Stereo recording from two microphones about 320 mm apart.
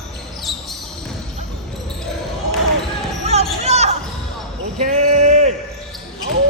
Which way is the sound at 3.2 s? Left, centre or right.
Centre.